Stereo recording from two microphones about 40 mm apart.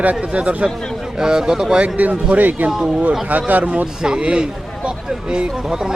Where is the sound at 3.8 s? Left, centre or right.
Right.